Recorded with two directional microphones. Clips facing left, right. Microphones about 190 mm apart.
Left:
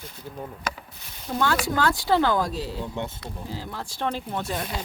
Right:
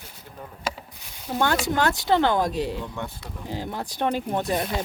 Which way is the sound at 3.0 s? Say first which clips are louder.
Left 2 dB; 20° left (ahead or behind).